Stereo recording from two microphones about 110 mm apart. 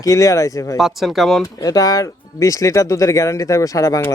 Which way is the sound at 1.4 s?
30° left (ahead or behind).